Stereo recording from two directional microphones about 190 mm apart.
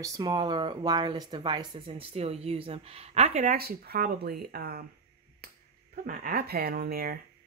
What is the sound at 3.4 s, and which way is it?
Speech, 55° right (ahead or behind).